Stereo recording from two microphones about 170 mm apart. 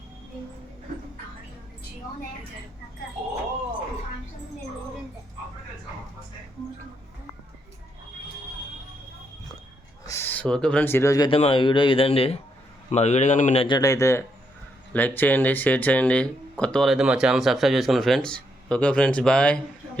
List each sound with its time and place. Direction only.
10.1 s speech: 10° left (ahead or behind)
11.3 s a man's voice: 35° left (ahead or behind); by 19.5 s 5° left (ahead or behind)